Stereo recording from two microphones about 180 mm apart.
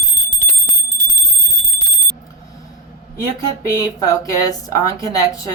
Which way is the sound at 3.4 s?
20° left (ahead or behind).